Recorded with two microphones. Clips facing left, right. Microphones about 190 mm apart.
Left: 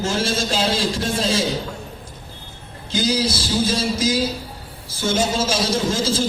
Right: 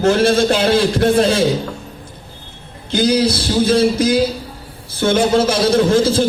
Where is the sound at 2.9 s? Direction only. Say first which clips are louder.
Right 6 dB; 60° right (ahead or behind).